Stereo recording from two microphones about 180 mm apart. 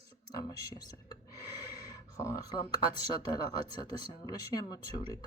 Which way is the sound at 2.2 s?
20° left (ahead or behind).